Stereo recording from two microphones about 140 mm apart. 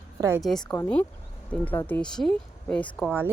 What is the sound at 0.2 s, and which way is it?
Speech, 20° right (ahead or behind).